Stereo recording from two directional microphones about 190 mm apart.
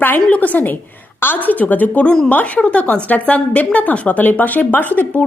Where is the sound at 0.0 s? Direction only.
10° left (ahead or behind).